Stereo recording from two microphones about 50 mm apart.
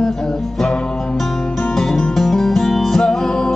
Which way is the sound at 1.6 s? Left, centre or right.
Centre.